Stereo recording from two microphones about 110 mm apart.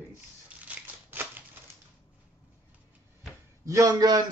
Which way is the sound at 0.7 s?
15° right (ahead or behind).